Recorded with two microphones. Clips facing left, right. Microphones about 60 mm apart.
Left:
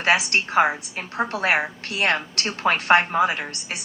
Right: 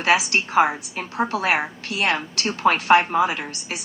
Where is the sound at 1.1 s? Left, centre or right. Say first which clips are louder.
Right 1 dB; left.